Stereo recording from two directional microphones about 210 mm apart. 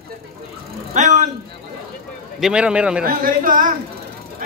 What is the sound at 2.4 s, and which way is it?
Speech, 5° right (ahead or behind).